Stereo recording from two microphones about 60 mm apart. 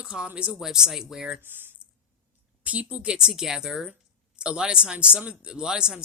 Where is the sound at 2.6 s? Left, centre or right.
Right.